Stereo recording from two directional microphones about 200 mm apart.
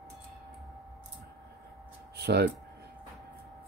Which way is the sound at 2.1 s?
55° right (ahead or behind).